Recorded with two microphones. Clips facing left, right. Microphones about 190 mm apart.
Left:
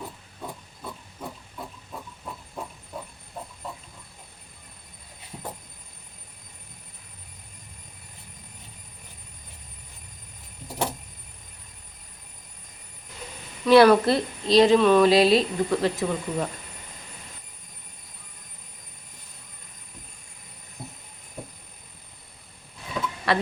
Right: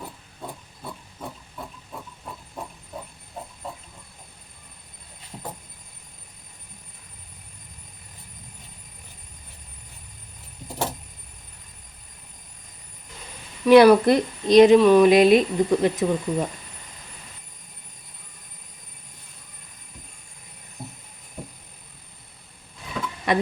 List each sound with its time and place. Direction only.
13.7 s a woman's voice: 10° right (ahead or behind)
23.3 s speech: 20° right (ahead or behind)